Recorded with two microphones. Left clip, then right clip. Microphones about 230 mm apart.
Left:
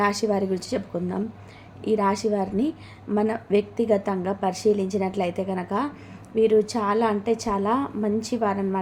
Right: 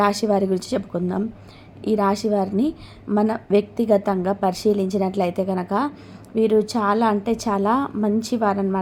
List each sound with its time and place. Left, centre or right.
0.0 s a woman's voice: centre